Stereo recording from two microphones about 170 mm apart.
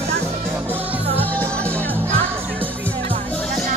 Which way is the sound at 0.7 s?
10° right (ahead or behind).